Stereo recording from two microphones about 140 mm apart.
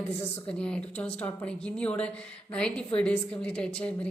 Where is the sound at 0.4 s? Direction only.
5° left (ahead or behind).